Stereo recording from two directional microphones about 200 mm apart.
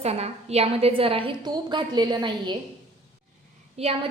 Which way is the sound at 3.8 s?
30° right (ahead or behind).